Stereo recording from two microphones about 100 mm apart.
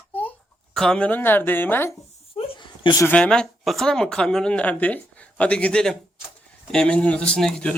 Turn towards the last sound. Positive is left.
turn(degrees=10)  # may be behind; listen again after turning